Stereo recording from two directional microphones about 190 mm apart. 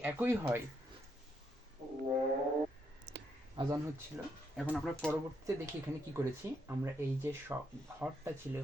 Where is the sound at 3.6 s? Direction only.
25° right (ahead or behind).